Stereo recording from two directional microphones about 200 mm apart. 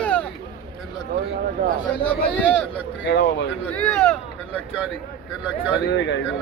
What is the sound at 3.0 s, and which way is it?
Speech, 60° left (ahead or behind).